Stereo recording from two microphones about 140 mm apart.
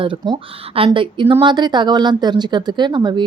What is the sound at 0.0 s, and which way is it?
Speech, 40° right (ahead or behind).